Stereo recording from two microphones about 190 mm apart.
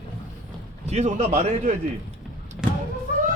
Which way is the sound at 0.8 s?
35° right (ahead or behind).